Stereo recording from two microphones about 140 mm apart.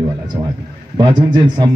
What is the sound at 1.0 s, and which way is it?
Speech, 35° right (ahead or behind).